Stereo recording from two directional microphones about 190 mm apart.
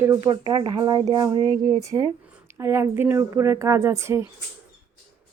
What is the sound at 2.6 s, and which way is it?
Speech, 15° right (ahead or behind).